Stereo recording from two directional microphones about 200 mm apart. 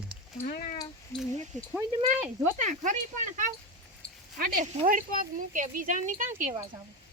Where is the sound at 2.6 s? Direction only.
40° right (ahead or behind).